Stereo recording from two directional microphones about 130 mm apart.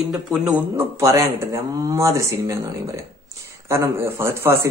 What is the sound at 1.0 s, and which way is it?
A woman's voice, 25° right (ahead or behind).